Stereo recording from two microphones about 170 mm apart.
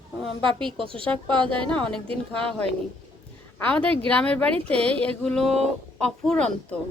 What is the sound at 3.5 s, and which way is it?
Speech, 10° left (ahead or behind).